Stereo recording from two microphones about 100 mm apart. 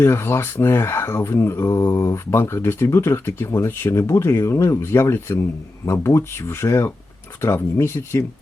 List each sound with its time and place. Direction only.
0.0 s speech: 25° left (ahead or behind)